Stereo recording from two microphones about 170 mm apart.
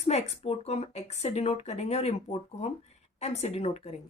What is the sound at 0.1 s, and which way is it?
Speech, 40° left (ahead or behind).